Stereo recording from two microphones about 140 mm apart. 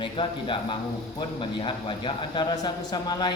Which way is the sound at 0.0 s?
35° left (ahead or behind).